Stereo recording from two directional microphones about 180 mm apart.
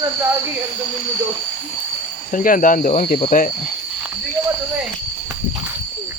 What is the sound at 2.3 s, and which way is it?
Speech, 45° left (ahead or behind).